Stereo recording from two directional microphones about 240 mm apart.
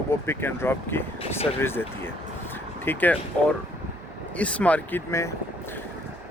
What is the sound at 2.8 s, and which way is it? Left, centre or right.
Speech, centre.